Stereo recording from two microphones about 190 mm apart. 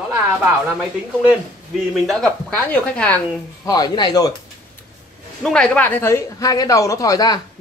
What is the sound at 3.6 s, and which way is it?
Speech, 20° left (ahead or behind).